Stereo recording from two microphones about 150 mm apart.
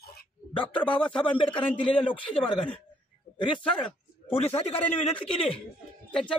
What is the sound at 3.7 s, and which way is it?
A man's voice, 40° left (ahead or behind).